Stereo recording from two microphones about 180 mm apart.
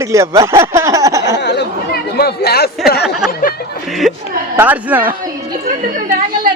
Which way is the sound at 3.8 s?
Centre (ahead or behind).